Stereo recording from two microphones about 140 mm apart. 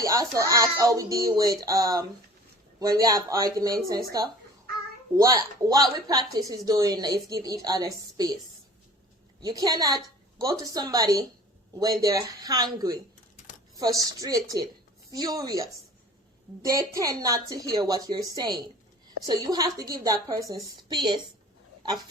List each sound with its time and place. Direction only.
0.0 s speech: 25° right (ahead or behind)
5.1 s speech: 25° right (ahead or behind)
9.4 s speech: 25° right (ahead or behind)
16.7 s speech: 25° right (ahead or behind)